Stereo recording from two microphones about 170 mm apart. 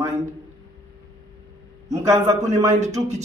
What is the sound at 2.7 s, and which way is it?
Speech, 40° right (ahead or behind).